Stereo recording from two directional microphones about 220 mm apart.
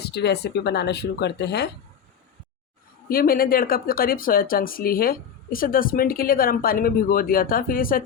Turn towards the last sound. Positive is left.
turn(degrees=40)  # may be behind; listen again after turning